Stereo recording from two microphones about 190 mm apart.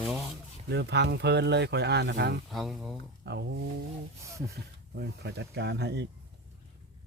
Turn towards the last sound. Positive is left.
turn(degrees=-65)  # may be behind; listen again after turning